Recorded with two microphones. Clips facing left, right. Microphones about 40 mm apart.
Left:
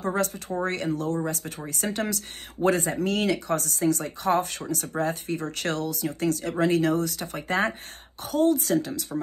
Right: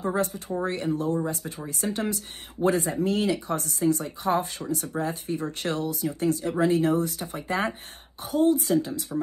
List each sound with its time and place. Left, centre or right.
0.7 s speech: left
2.6 s speech: left
7.3 s speech: left